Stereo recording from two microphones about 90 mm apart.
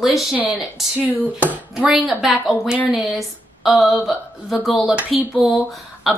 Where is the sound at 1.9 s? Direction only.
5° right (ahead or behind).